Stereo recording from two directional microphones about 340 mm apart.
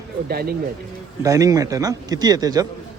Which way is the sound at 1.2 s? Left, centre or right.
Centre.